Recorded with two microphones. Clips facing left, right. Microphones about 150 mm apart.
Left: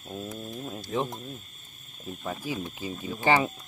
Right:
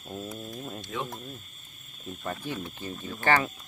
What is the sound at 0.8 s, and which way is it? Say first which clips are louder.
Speech: left 7 dB; 35° left (ahead or behind).